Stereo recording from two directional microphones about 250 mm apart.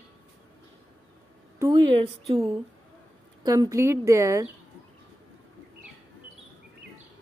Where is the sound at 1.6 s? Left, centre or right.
Centre.